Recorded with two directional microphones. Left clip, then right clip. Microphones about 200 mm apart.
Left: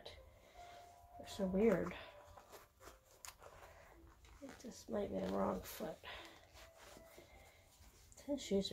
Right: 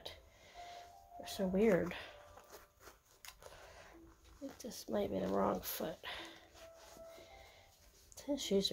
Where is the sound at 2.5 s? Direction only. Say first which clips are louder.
Right 1 dB; 5° left (ahead or behind).